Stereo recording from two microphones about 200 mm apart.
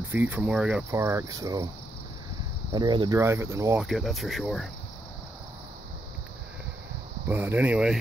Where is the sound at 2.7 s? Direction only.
20° right (ahead or behind).